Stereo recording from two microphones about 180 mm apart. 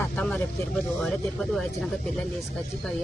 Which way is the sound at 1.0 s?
Centre (ahead or behind).